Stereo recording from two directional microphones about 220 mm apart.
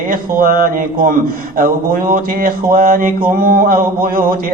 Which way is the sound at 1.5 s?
40° right (ahead or behind).